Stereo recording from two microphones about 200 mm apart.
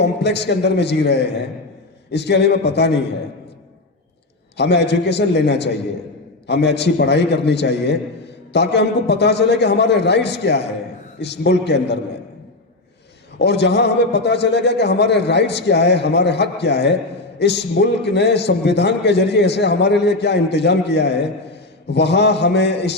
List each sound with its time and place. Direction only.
0.0 s a man's voice: 60° left (ahead or behind)
4.5 s a man's voice: 60° left (ahead or behind)
13.4 s a man's voice: 55° left (ahead or behind)